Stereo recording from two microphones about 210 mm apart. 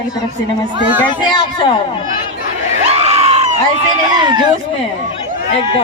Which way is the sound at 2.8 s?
30° right (ahead or behind).